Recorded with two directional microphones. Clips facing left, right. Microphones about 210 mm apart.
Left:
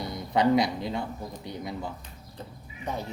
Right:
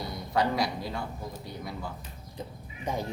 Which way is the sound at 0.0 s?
20° left (ahead or behind).